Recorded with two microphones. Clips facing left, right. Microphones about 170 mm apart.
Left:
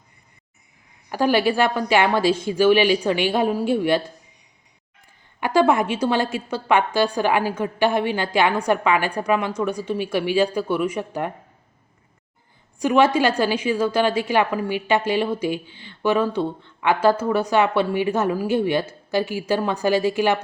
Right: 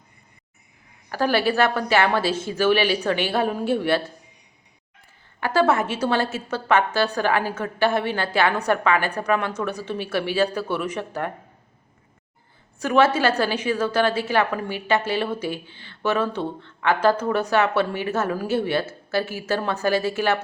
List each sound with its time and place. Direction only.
1.1 s a woman's voice: 15° left (ahead or behind)
5.4 s a woman's voice: 15° left (ahead or behind)
12.8 s a woman's voice: 15° left (ahead or behind)